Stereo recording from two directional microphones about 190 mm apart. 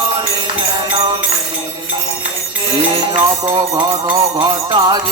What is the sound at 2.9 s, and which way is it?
Music, 25° right (ahead or behind).